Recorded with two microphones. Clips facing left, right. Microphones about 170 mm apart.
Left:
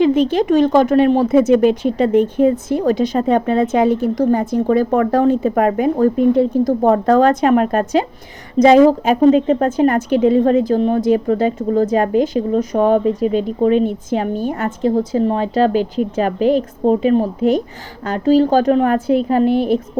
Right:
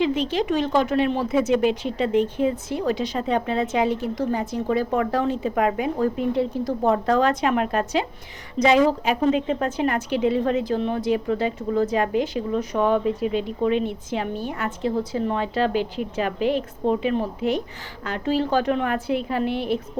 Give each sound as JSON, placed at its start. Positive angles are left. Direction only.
{"t": 0.0, "sound": "a woman's voice", "side_deg": 50}